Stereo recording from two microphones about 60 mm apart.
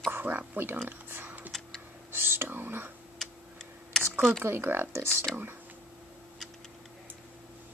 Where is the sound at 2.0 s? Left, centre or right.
Right.